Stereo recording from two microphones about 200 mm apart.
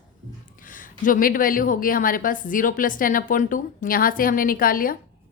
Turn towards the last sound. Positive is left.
turn(degrees=45)  # may be behind; listen again after turning